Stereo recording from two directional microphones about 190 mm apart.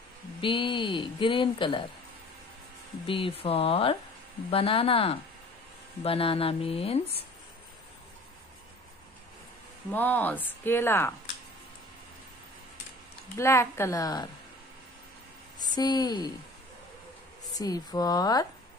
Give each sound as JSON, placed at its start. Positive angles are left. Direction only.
{"t": 0.4, "sound": "speech", "side_deg": 25}
{"t": 3.1, "sound": "speech", "side_deg": 30}
{"t": 9.8, "sound": "speech", "side_deg": 10}
{"t": 13.4, "sound": "speech", "side_deg": 15}
{"t": 15.6, "sound": "a woman's voice", "side_deg": 20}
{"t": 17.6, "sound": "speech", "side_deg": 20}